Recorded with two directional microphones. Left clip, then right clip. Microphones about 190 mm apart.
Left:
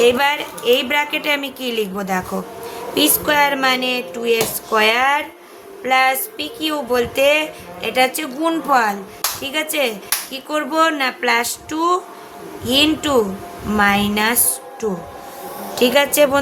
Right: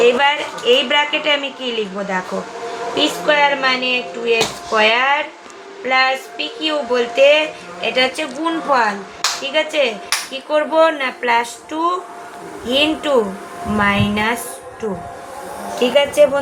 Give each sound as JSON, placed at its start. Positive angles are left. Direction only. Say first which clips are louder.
{"t": 0.0, "sound": "speech", "louder": "right 1 dB", "side_deg": 45}
{"t": 15.8, "sound": "speech", "louder": "right 1 dB", "side_deg": 60}